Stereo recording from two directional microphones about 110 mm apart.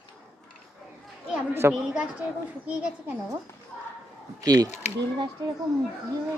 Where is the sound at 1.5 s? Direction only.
20° right (ahead or behind).